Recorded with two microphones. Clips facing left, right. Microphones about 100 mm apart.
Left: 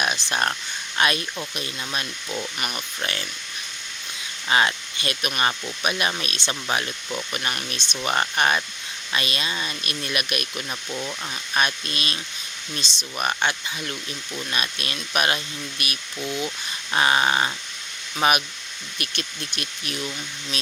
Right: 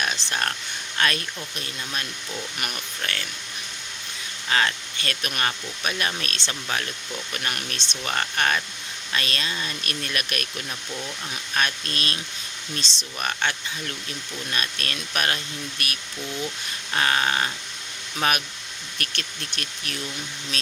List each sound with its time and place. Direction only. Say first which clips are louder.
0.0 s a sound: left 3 dB; 15° left (ahead or behind)
0.9 s speech: left 2 dB; 15° left (ahead or behind)
2.6 s speech: left 2 dB; centre (ahead or behind)
3.0 s speech: left 1 dB; 20° left (ahead or behind)
4.4 s speech: left 3 dB; 15° left (ahead or behind)